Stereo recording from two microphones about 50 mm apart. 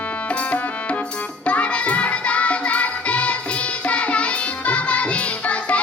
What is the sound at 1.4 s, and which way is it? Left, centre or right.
Music, left.